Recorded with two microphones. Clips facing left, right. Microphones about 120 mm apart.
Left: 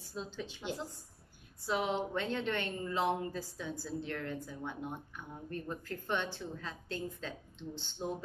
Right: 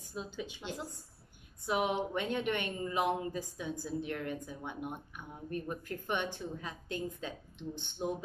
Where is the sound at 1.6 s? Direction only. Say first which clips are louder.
Right 2 dB; 15° right (ahead or behind).